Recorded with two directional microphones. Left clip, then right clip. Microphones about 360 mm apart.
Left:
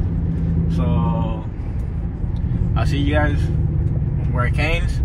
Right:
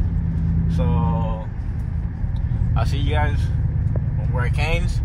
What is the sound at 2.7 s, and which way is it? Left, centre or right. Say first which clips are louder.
Vehicle: left 4 dB; right.